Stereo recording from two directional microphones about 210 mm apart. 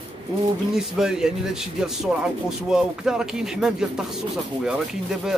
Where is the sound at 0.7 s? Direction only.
Centre (ahead or behind).